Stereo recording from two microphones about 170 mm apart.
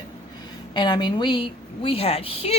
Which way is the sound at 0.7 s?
25° left (ahead or behind).